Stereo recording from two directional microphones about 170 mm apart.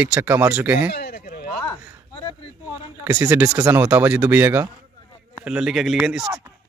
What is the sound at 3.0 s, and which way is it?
Speech, 10° right (ahead or behind).